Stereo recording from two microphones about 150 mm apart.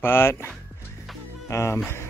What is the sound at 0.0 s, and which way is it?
Speech, 15° left (ahead or behind).